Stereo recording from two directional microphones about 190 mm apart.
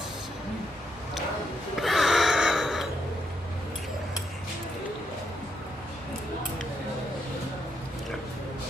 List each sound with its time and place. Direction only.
1.8 s gasp: centre (ahead or behind)